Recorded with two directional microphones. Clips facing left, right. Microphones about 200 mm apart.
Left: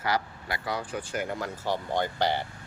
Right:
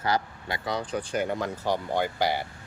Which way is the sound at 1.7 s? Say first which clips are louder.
Right 1 dB; 10° right (ahead or behind).